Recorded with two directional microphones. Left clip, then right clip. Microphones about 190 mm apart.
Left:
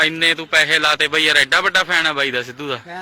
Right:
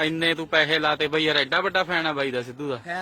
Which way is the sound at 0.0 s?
10° right (ahead or behind).